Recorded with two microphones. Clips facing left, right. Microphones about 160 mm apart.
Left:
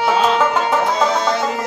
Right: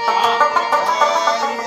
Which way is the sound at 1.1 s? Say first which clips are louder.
Even; 50° left (ahead or behind).